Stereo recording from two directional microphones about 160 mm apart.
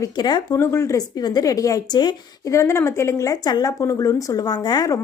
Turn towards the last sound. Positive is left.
turn(degrees=25)  # may be behind; listen again after turning